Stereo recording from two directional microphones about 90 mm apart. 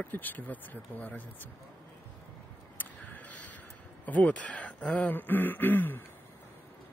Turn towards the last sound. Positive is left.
turn(degrees=20)  # may be behind; listen again after turning